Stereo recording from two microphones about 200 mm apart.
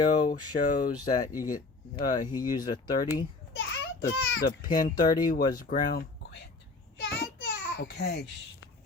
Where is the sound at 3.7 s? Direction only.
70° left (ahead or behind).